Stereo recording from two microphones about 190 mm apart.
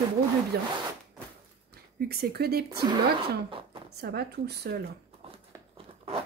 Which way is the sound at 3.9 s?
55° right (ahead or behind).